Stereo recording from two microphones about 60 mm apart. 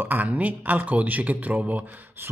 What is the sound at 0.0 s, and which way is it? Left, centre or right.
Speech, right.